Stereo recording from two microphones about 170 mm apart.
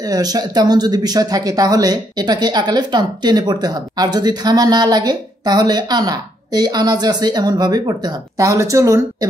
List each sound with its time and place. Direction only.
0.0 s speech: 20° right (ahead or behind)